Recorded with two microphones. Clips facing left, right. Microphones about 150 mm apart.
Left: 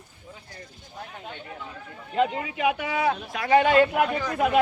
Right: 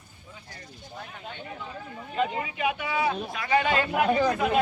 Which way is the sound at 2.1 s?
70° left (ahead or behind).